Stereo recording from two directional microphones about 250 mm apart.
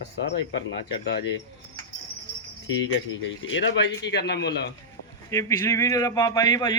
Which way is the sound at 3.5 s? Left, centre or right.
Left.